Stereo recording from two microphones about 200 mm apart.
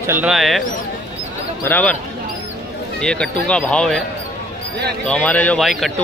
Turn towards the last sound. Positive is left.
turn(degrees=0)  # may be behind; listen again after turning